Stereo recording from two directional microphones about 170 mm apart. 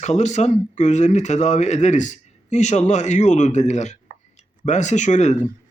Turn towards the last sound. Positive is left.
turn(degrees=45)  # may be behind; listen again after turning